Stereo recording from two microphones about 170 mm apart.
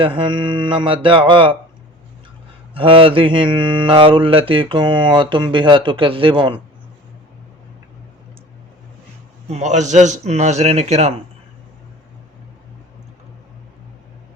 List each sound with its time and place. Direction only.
0.0 s mantra: 30° right (ahead or behind)
2.7 s mantra: 30° right (ahead or behind)
9.5 s a man's voice: 40° right (ahead or behind)